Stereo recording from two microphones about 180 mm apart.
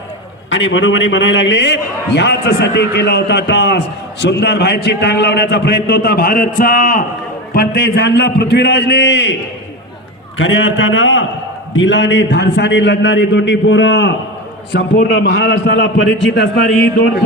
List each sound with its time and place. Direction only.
0.5 s a man's voice: 90° left
10.3 s a man's voice: 90° left
14.7 s a man's voice: 80° left